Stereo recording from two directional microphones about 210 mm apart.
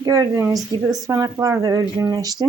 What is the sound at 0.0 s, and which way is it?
Speech, 15° right (ahead or behind).